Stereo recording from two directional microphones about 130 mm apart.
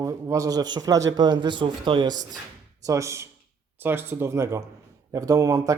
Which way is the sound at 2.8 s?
25° right (ahead or behind).